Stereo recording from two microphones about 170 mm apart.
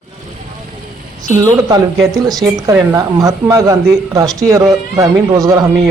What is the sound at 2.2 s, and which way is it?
A woman's voice, 20° right (ahead or behind).